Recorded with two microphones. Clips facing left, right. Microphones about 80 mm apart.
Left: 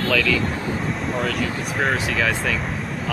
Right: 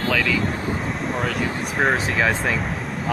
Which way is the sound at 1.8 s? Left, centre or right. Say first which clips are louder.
Right 2 dB; right.